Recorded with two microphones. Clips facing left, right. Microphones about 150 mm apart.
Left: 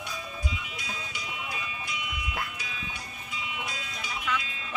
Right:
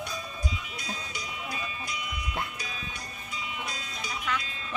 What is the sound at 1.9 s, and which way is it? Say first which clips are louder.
Music: left 1 dB; 40° right (ahead or behind).